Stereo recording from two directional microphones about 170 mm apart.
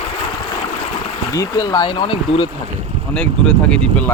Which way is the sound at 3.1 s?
5° left (ahead or behind).